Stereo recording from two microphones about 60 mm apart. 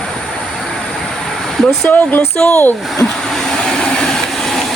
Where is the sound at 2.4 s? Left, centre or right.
Centre.